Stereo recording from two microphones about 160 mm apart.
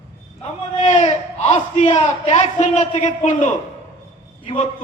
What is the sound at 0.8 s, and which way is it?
A man's voice, 45° left (ahead or behind).